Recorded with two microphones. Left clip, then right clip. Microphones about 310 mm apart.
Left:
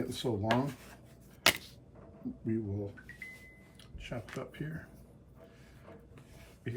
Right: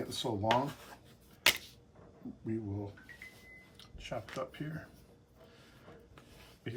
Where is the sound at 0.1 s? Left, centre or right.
Centre.